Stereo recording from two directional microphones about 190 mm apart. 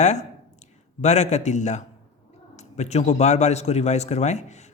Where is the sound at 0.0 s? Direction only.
40° left (ahead or behind).